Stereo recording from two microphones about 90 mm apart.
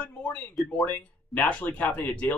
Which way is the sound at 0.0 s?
15° left (ahead or behind).